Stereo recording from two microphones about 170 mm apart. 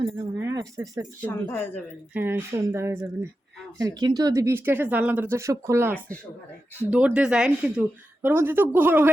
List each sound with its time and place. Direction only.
0.1 s speech: 20° right (ahead or behind)
1.2 s speech: 15° left (ahead or behind)
2.1 s speech: 10° right (ahead or behind)